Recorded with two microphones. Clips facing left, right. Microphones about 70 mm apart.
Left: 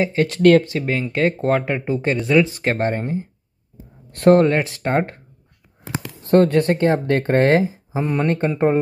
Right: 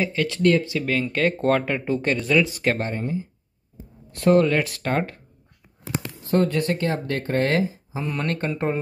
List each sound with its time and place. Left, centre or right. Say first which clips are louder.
0.0 s speech: left 5 dB; left
0.4 s speech: left 7 dB; left
0.8 s speech: left 2 dB; centre
2.9 s speech: left 4 dB; left
4.5 s speech: left 3 dB; left
6.3 s speech: left 7 dB; left
8.2 s speech: left 7 dB; centre